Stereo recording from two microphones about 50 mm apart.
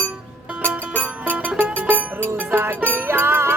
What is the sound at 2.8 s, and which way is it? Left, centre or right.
Music, right.